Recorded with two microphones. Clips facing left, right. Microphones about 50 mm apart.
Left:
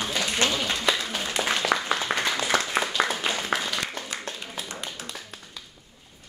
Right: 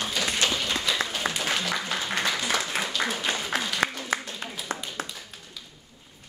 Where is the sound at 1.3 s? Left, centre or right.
Right.